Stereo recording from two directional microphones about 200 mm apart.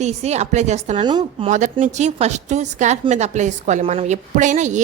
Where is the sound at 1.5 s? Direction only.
40° right (ahead or behind).